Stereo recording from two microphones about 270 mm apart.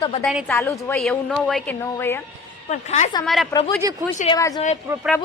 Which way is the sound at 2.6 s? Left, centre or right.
Left.